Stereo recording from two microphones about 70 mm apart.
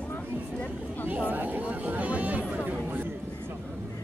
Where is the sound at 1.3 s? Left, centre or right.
Right.